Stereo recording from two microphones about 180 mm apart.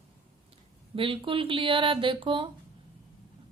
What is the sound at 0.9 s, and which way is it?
Speech, 30° right (ahead or behind).